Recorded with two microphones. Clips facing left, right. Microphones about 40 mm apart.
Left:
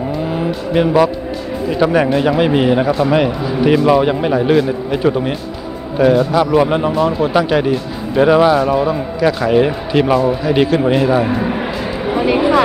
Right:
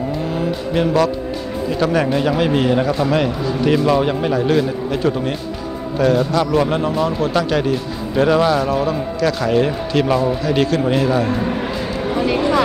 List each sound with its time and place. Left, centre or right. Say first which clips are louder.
0.7 s speech: left 4 dB; centre